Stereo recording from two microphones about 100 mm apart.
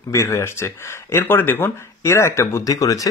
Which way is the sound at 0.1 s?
30° left (ahead or behind).